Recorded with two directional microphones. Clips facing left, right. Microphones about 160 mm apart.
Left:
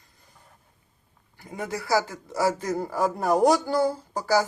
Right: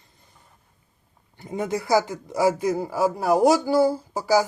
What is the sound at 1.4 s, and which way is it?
Speech, 25° right (ahead or behind).